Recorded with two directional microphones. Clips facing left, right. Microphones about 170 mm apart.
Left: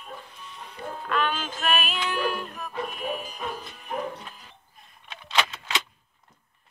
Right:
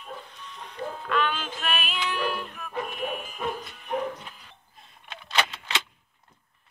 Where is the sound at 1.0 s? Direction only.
40° left (ahead or behind).